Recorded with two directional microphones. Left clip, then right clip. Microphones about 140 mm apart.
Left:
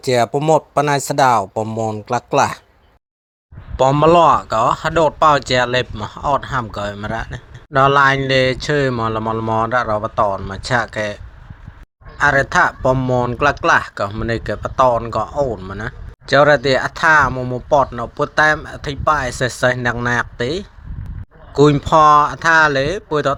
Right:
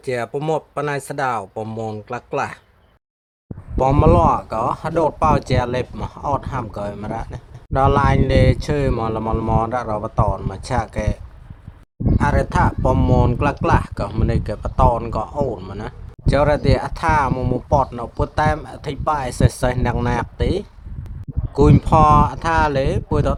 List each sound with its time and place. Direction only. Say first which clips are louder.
0.0 s speech: left 7 dB; 20° left (ahead or behind)
1.6 s a man's voice: left 6 dB; centre (ahead or behind)
2.0 s speech: left 10 dB; 20° left (ahead or behind)
4.0 s a man's voice: left 6 dB; 10° left (ahead or behind)
15.5 s speech: left 2 dB; 10° right (ahead or behind)
15.8 s a man's voice: left 3 dB; 5° left (ahead or behind)
17.3 s speech: even; 15° right (ahead or behind)
17.7 s a man's voice: left 5 dB; centre (ahead or behind)